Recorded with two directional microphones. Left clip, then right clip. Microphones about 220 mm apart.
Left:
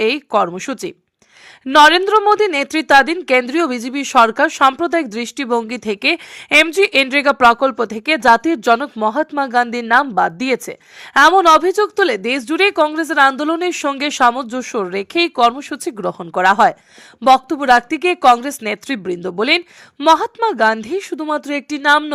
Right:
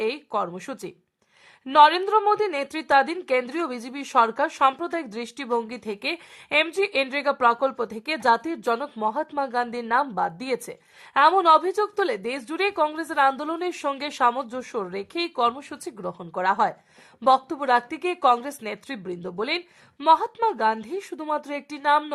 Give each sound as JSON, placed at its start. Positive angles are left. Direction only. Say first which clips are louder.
{"t": 0.0, "sound": "a woman's voice", "louder": "left 11 dB", "side_deg": 25}